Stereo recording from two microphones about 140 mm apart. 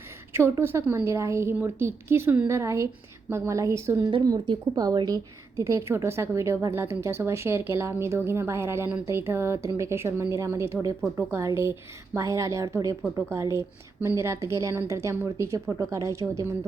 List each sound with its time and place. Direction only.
0.3 s a woman's voice: 15° right (ahead or behind)